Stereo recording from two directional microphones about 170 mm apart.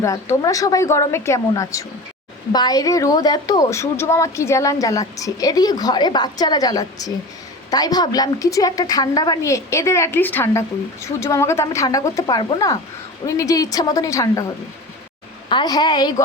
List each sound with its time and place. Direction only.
0.0 s a woman's voice: 20° left (ahead or behind)
15.4 s a woman's voice: 25° left (ahead or behind)